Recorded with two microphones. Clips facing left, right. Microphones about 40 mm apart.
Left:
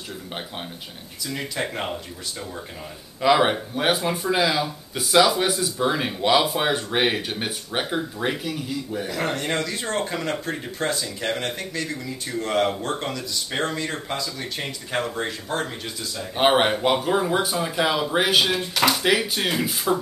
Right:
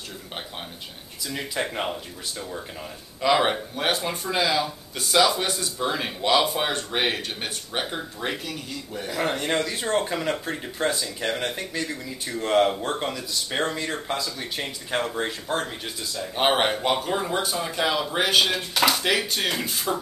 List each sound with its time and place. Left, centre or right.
1.3 s speech: centre
3.2 s speech: centre
9.1 s speech: centre
16.2 s speech: centre